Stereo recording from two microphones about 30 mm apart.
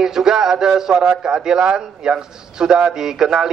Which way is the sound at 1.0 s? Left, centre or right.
Right.